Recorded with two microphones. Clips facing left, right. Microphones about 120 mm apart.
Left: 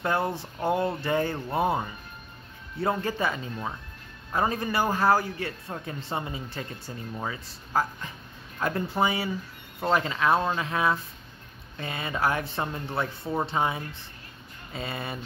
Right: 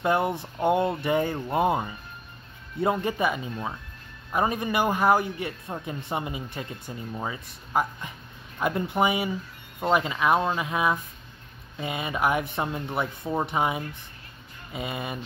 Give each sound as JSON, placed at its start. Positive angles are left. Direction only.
{"t": 0.0, "sound": "speech", "side_deg": -20}